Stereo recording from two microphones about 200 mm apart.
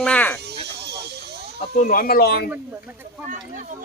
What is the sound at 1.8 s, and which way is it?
Speech, 45° left (ahead or behind).